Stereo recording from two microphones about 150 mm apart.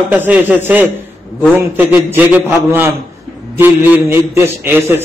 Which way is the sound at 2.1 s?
15° right (ahead or behind).